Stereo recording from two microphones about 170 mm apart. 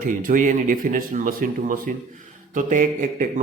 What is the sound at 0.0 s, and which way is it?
A man's voice, 55° right (ahead or behind).